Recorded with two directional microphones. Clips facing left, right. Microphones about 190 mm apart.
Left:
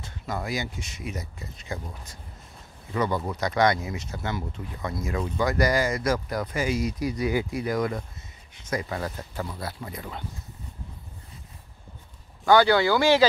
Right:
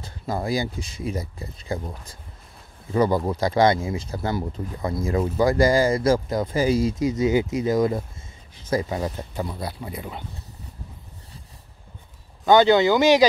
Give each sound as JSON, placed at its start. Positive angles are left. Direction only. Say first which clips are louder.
{"t": 0.0, "sound": "speech", "louder": "right 5 dB", "side_deg": -30}
{"t": 12.4, "sound": "speech", "louder": "right 3 dB", "side_deg": -20}